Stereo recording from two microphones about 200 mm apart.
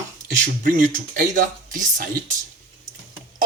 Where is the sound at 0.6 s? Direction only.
45° right (ahead or behind).